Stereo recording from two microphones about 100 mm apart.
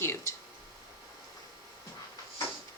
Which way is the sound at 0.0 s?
30° left (ahead or behind).